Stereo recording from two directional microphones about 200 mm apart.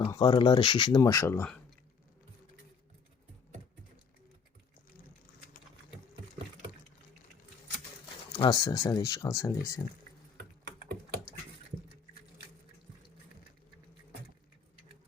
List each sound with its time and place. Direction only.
0.0 s speech: 25° left (ahead or behind); by 1.6 s 10° left (ahead or behind)
8.4 s speech: 20° left (ahead or behind)